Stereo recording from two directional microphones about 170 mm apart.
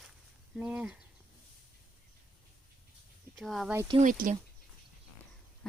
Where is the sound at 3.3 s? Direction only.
Centre (ahead or behind).